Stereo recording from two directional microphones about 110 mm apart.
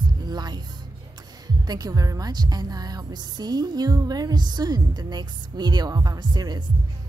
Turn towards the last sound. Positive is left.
turn(degrees=-40)  # may be behind; listen again after turning